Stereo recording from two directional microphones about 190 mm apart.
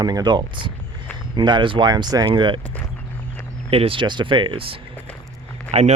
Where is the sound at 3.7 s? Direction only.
30° right (ahead or behind).